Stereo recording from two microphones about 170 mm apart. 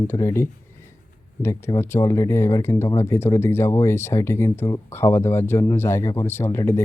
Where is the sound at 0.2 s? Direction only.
15° left (ahead or behind).